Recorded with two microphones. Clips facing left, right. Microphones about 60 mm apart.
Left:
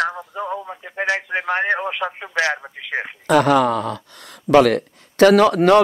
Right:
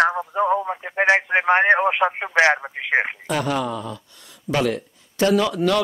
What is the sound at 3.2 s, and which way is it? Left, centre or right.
Speech, left.